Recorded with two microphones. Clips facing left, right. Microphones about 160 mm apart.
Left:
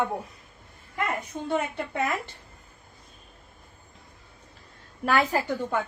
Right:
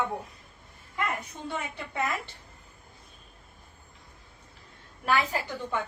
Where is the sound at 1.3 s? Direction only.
50° left (ahead or behind).